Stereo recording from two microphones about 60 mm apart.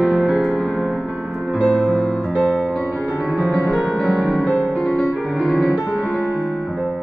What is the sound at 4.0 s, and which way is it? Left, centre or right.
Music, centre.